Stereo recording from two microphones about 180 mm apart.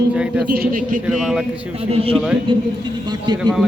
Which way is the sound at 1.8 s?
30° right (ahead or behind).